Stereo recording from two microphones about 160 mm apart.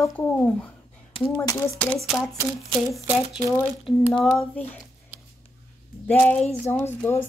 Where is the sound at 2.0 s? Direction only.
5° left (ahead or behind).